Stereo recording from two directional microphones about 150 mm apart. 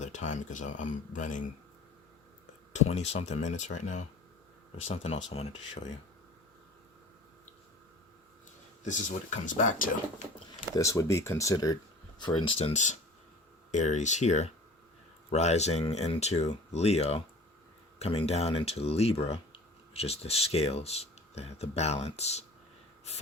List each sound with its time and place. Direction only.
0.0 s speech: 55° left (ahead or behind)
2.7 s speech: 45° left (ahead or behind)
8.8 s speech: 55° left (ahead or behind)
10.8 s speech: 20° left (ahead or behind)
12.2 s speech: 35° left (ahead or behind)